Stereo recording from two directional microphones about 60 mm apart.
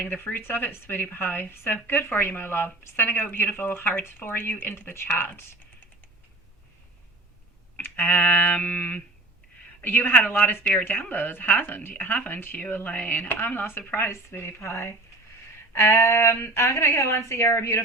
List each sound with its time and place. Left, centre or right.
0.0 s speech: left
7.8 s a woman's voice: left